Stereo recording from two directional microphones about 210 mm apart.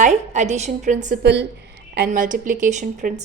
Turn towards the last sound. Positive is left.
turn(degrees=-35)  # may be behind; listen again after turning